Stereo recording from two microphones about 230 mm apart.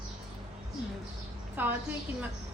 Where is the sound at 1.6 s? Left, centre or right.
Centre.